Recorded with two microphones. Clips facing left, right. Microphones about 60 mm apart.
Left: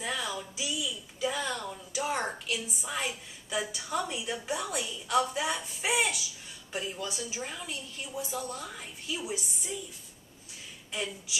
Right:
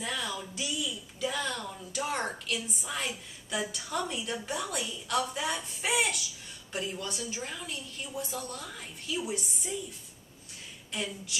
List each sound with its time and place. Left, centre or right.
0.0 s a sound: centre
5.0 s a woman's voice: centre
10.9 s speech: centre